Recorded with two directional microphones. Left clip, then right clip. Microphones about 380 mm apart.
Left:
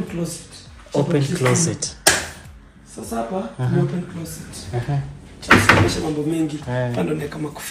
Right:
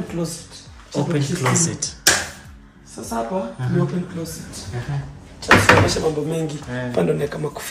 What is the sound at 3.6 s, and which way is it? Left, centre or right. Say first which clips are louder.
Speech: left 1 dB; centre.